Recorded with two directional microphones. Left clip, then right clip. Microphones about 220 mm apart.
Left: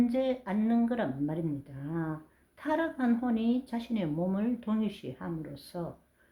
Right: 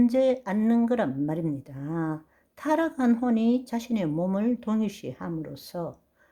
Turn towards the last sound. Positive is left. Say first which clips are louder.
# right 6 dB
turn(degrees=-45)  # may be behind; listen again after turning